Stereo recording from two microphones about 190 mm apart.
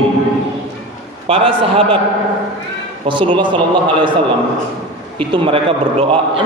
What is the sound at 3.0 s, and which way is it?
A man's voice, 25° right (ahead or behind).